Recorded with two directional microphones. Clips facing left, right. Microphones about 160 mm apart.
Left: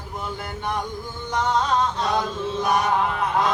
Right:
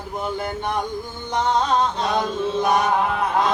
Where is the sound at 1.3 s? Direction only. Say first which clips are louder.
Right 2 dB; 25° right (ahead or behind).